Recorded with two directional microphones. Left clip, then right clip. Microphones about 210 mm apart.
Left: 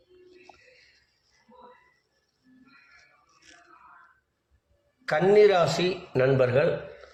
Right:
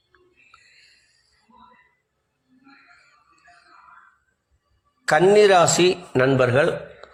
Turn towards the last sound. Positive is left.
turn(degrees=-45)  # may be behind; listen again after turning